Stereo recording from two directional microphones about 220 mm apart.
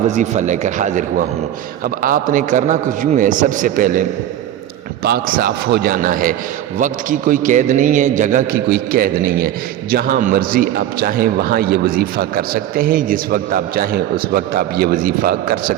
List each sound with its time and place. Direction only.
0.1 s a man's voice: 35° right (ahead or behind)
5.0 s a man's voice: 45° right (ahead or behind)